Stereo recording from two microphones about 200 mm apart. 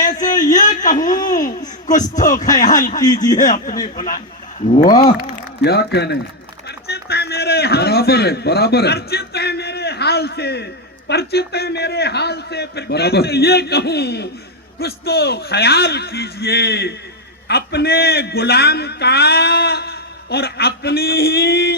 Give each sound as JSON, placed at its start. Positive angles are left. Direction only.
{"t": 0.0, "sound": "a sound", "side_deg": 40}
{"t": 0.5, "sound": "a man's voice", "side_deg": 40}
{"t": 3.0, "sound": "a man's voice", "side_deg": 20}
{"t": 3.3, "sound": "speech", "side_deg": 40}
{"t": 4.9, "sound": "a man's voice", "side_deg": 20}
{"t": 5.2, "sound": "speech", "side_deg": 55}
{"t": 6.7, "sound": "a sound", "side_deg": 55}
{"t": 11.1, "sound": "a man's voice", "side_deg": 55}